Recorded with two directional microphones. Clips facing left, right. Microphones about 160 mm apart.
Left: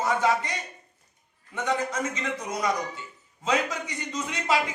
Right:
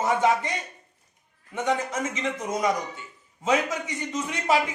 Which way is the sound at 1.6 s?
20° right (ahead or behind).